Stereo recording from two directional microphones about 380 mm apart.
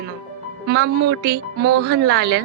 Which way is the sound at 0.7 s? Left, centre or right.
Right.